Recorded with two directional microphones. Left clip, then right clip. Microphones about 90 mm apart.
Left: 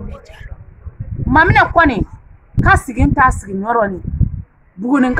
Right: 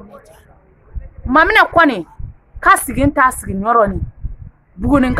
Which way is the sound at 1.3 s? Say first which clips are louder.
Even; 40° right (ahead or behind).